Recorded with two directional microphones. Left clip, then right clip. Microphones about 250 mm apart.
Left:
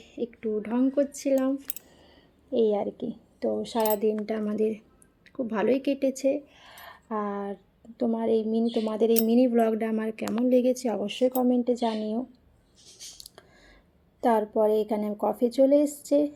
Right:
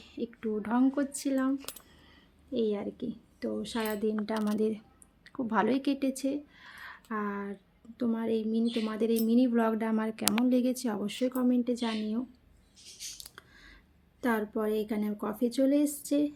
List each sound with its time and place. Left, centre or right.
0.0 s a woman's voice: centre
2.5 s a woman's voice: centre
7.1 s speech: right
7.9 s speech: centre
13.1 s a sound: centre
14.2 s speech: centre